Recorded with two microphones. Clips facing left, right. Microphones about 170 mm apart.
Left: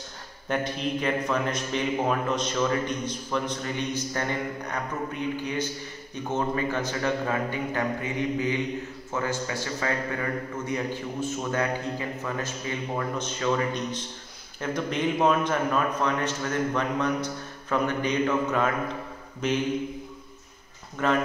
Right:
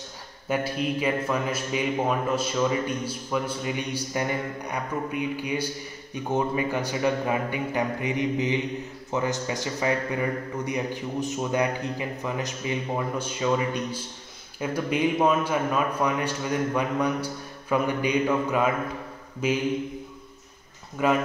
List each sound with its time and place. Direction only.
0.5 s a man's voice: 5° right (ahead or behind)
21.0 s a man's voice: 10° right (ahead or behind)